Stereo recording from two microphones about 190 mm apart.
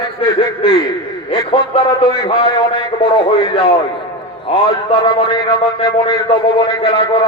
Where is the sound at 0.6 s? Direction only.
30° left (ahead or behind).